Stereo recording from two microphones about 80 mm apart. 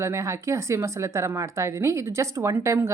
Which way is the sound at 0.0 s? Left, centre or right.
Right.